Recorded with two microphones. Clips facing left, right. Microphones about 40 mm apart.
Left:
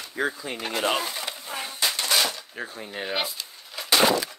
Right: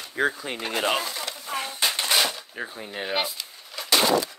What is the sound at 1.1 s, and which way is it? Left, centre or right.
Speech, centre.